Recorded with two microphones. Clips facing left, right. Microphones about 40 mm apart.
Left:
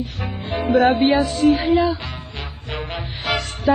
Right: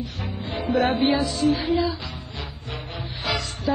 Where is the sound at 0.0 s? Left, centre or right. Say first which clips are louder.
Left 3 dB; left.